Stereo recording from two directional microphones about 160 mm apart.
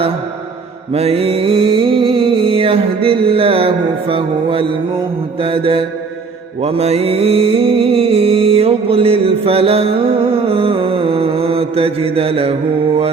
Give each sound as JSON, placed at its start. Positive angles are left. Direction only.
{"t": 0.9, "sound": "mantra", "side_deg": -40}